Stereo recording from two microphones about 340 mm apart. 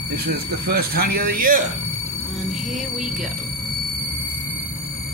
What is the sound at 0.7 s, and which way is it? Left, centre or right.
Speech, right.